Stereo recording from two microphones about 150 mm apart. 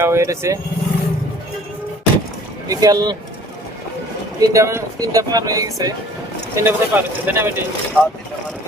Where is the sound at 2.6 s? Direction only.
25° right (ahead or behind).